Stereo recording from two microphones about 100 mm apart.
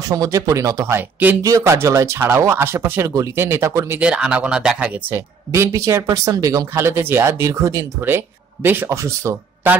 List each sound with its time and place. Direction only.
0.1 s speech: 35° right (ahead or behind)
0.9 s speech: 20° right (ahead or behind)
1.4 s speech: 30° right (ahead or behind)
4.0 s speech: 10° right (ahead or behind)
5.5 s speech: 30° right (ahead or behind)